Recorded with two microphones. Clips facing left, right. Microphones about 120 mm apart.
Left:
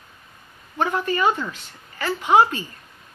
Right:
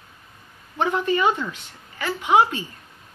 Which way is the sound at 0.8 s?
20° right (ahead or behind).